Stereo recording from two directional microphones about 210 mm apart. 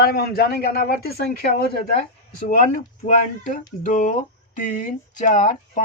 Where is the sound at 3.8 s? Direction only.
35° left (ahead or behind).